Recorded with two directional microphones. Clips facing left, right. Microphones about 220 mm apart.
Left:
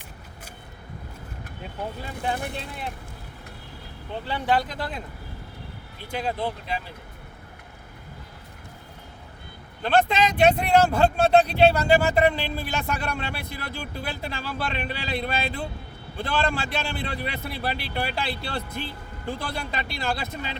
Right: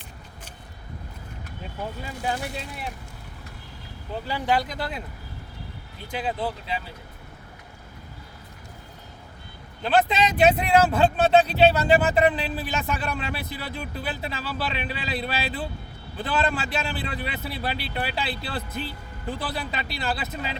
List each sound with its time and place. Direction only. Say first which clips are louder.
2.0 s speech: even; 55° left (ahead or behind)
4.1 s speech: even; 10° right (ahead or behind)
6.1 s speech: even; 5° right (ahead or behind)
9.8 s speech: even; 5° right (ahead or behind)